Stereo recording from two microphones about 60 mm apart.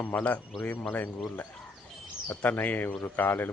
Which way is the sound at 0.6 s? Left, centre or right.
Left.